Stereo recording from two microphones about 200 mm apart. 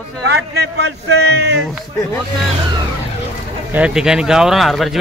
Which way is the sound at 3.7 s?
5° right (ahead or behind).